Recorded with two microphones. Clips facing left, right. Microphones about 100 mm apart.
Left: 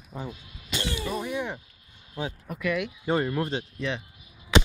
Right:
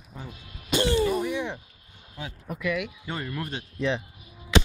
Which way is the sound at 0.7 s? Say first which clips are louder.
Right 9 dB; 40° right (ahead or behind).